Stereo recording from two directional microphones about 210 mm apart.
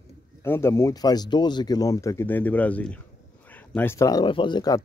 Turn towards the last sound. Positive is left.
turn(degrees=20)  # may be behind; listen again after turning